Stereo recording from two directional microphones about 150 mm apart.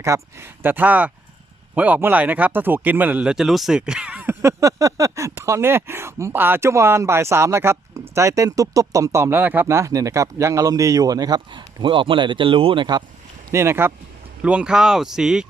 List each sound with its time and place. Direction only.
0.0 s speech: 20° right (ahead or behind)
13.5 s speech: 15° right (ahead or behind)